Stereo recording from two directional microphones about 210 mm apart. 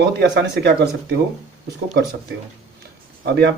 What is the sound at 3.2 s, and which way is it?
Speech, 55° right (ahead or behind).